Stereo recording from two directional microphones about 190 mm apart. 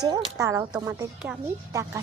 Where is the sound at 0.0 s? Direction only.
20° right (ahead or behind).